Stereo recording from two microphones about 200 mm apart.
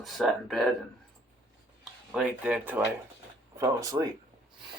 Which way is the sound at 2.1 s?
5° right (ahead or behind).